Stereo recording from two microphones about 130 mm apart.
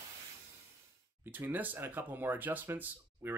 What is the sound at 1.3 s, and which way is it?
Speech, 15° right (ahead or behind).